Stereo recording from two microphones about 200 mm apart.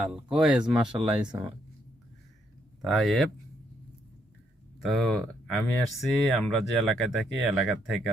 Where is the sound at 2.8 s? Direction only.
Centre (ahead or behind).